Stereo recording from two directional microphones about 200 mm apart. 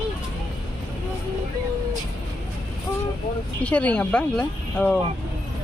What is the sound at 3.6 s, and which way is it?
Speech, 5° left (ahead or behind).